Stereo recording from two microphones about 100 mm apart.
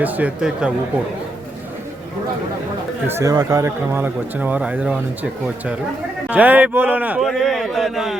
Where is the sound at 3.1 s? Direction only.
25° right (ahead or behind).